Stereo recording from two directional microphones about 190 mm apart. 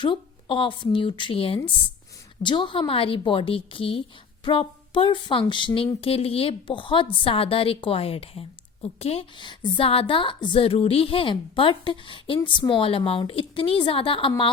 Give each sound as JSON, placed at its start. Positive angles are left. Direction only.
{"t": 0.0, "sound": "speech", "side_deg": 25}